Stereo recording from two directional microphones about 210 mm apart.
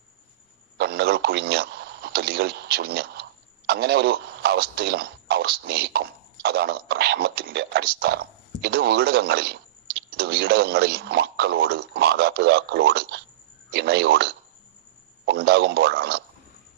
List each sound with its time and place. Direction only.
0.8 s speech: 50° right (ahead or behind)